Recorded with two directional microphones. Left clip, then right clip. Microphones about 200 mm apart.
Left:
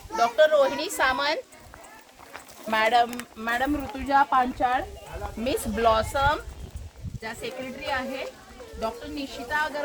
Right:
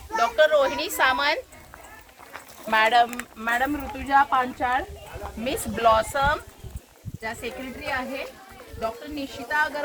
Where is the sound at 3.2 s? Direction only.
20° left (ahead or behind).